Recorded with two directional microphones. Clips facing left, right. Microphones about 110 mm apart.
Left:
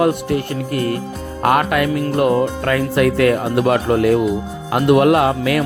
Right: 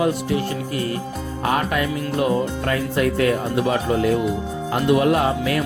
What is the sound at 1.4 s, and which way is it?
Music, 70° left (ahead or behind).